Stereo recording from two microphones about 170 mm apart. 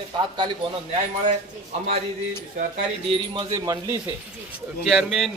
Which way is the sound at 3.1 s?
30° right (ahead or behind).